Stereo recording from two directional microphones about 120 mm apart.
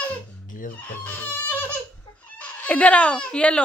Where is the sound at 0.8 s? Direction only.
15° left (ahead or behind).